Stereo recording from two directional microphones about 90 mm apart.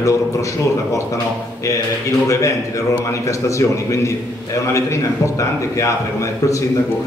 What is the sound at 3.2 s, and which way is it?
A man's voice, 35° left (ahead or behind).